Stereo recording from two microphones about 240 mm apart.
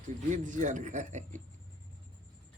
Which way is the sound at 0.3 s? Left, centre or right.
Right.